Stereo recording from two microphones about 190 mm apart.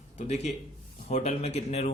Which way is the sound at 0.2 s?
35° left (ahead or behind).